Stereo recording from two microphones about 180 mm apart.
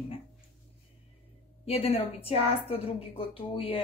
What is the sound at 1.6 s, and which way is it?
A woman's voice, 35° left (ahead or behind).